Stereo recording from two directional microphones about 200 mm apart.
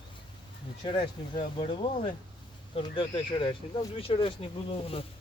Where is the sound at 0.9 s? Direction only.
25° left (ahead or behind).